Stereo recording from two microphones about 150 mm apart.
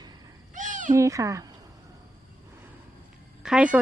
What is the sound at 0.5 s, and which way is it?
Cat, 60° right (ahead or behind).